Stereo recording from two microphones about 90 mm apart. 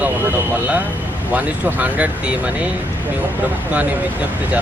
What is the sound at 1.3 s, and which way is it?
Speech, 20° right (ahead or behind).